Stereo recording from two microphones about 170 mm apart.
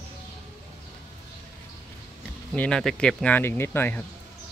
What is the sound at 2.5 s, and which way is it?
Speech, 5° left (ahead or behind).